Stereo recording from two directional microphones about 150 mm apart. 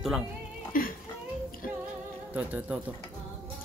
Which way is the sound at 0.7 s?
65° left (ahead or behind).